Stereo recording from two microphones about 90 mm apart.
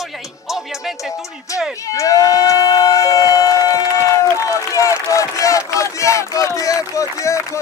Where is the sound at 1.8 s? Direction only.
40° left (ahead or behind).